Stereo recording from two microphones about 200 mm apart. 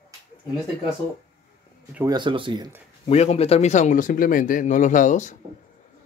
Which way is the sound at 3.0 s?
30° left (ahead or behind).